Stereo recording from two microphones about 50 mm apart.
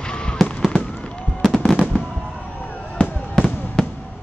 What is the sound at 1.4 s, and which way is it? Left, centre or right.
Fireworks, centre.